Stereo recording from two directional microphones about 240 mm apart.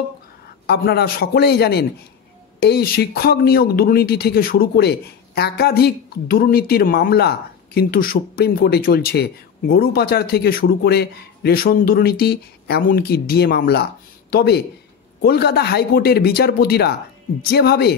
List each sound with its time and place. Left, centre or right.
0.7 s speech: left